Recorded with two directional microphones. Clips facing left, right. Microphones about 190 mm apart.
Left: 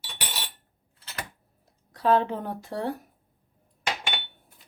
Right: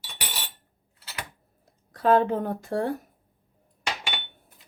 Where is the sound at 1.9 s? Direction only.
50° right (ahead or behind).